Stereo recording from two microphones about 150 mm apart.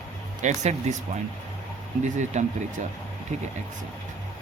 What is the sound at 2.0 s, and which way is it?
Speech, 55° right (ahead or behind).